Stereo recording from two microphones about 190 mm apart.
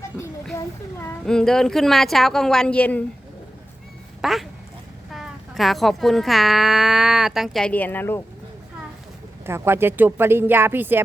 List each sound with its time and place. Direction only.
0.5 s child singing: 15° left (ahead or behind)
1.2 s a child's voice: 5° left (ahead or behind)
4.2 s a child's voice: centre (ahead or behind)
9.5 s speech: 10° right (ahead or behind)